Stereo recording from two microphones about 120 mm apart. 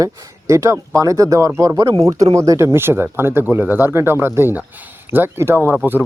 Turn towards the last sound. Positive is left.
turn(degrees=-15)  # may be behind; listen again after turning